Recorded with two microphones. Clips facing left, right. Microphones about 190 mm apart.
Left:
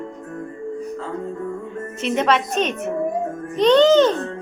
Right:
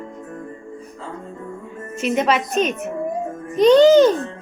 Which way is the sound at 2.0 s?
5° right (ahead or behind).